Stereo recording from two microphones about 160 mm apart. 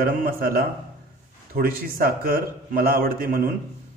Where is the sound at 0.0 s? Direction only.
65° right (ahead or behind).